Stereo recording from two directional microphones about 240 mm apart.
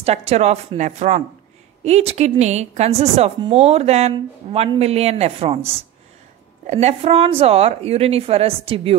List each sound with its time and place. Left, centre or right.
0.0 s a woman's voice: right
6.7 s a woman's voice: right